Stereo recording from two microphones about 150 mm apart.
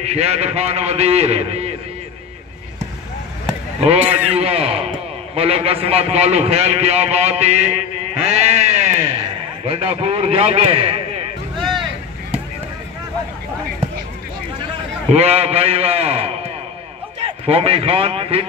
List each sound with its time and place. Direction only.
0.0 s a man's voice: 45° right (ahead or behind)
4.0 s a man's voice: 10° right (ahead or behind)
4.3 s a man's voice: 40° right (ahead or behind)
8.3 s bleat: 50° right (ahead or behind)
9.7 s a man's voice: 40° right (ahead or behind)
15.1 s a man's voice: 45° right (ahead or behind)